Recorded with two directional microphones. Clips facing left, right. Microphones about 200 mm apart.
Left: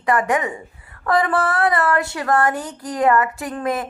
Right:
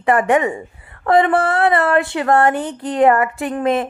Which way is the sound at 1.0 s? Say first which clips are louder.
Right 5 dB; 25° right (ahead or behind).